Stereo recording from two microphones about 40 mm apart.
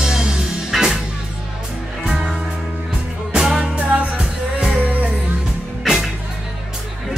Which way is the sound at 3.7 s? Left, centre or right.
Right.